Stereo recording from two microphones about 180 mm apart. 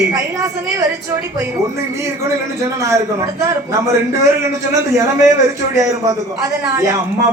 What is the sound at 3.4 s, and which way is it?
A man's voice, 15° right (ahead or behind).